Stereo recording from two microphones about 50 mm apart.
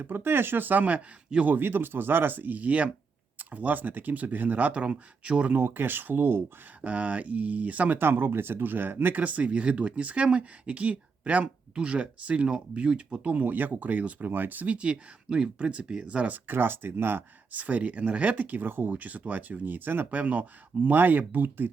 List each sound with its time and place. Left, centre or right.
0.0 s speech: right
1.5 s speech: right
5.5 s speech: right
6.8 s speech: right
7.9 s speech: right
9.2 s speech: right
13.2 s speech: right
16.3 s speech: right
17.5 s speech: right
18.6 s speech: right
18.9 s speech: right